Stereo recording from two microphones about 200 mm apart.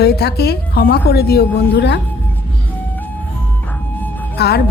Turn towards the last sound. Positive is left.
turn(degrees=55)  # may be behind; listen again after turning